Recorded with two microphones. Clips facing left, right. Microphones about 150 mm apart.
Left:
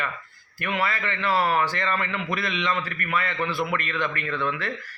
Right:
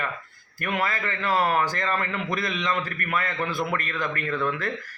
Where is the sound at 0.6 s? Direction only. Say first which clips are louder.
Even; 45° right (ahead or behind).